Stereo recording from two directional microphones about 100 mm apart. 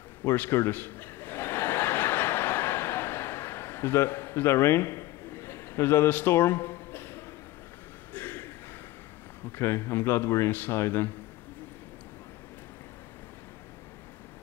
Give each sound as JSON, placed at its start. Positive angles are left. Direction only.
{"t": 0.2, "sound": "chuckle", "side_deg": 25}
{"t": 8.1, "sound": "a sound", "side_deg": 20}
{"t": 9.6, "sound": "speech", "side_deg": 25}